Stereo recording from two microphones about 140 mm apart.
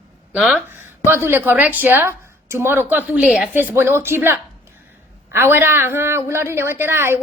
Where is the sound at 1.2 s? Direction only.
15° right (ahead or behind).